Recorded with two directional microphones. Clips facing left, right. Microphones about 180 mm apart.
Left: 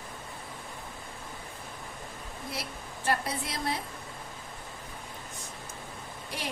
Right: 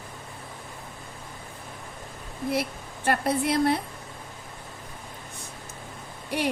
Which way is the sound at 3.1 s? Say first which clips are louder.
Right 7 dB; 60° right (ahead or behind).